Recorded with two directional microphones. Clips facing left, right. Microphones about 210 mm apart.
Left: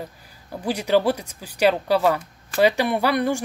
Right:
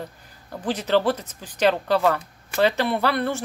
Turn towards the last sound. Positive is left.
turn(degrees=15)  # may be behind; listen again after turning